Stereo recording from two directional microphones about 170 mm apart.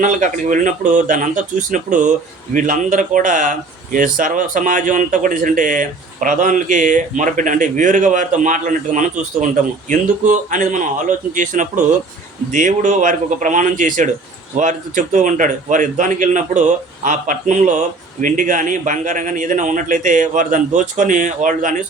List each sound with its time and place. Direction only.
0.0 s speech: 50° right (ahead or behind)